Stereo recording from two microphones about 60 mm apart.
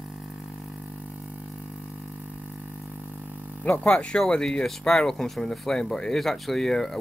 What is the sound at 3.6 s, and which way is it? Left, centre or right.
Speech, left.